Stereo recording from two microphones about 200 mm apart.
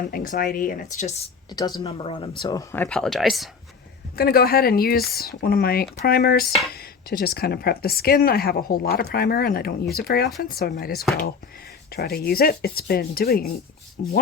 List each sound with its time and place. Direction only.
0.1 s speech: 45° left (ahead or behind); by 3.5 s centre (ahead or behind)
4.2 s speech: 50° left (ahead or behind)